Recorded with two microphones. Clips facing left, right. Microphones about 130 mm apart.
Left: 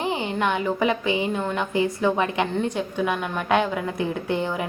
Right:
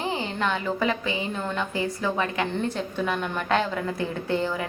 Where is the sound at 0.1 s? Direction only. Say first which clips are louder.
Left 3 dB; 15° left (ahead or behind).